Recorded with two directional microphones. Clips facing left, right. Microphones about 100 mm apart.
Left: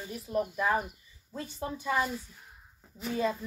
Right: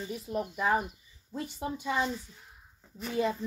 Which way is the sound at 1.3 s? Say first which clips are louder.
Right 1 dB; 15° right (ahead or behind).